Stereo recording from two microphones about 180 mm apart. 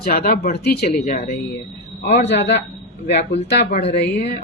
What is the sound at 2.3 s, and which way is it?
A man's voice, 70° left (ahead or behind).